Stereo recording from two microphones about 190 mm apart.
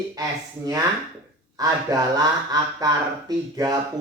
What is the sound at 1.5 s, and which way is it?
A man's voice, 20° right (ahead or behind).